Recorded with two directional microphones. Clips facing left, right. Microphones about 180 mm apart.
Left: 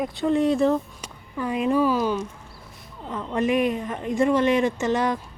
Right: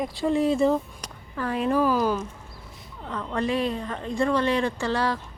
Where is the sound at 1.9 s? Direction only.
5° right (ahead or behind).